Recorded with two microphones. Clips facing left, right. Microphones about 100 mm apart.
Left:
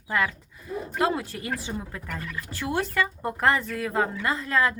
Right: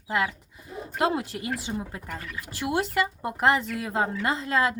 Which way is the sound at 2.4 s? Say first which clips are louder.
Right 1 dB; 15° right (ahead or behind).